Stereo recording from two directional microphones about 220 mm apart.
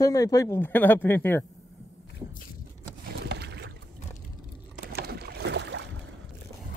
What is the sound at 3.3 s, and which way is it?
Boat, 50° right (ahead or behind).